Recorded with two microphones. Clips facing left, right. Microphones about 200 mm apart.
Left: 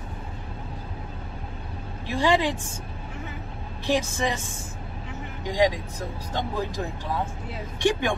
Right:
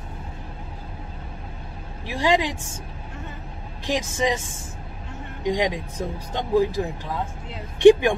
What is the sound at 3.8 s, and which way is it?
Speech, 15° right (ahead or behind).